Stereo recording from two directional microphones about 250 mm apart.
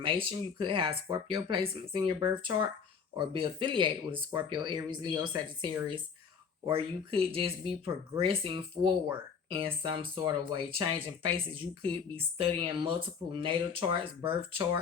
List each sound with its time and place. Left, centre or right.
0.0 s speech: right